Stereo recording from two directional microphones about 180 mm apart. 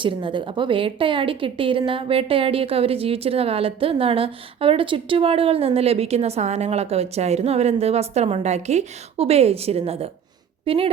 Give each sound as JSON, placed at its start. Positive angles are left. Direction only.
{"t": 0.0, "sound": "a woman's voice", "side_deg": -25}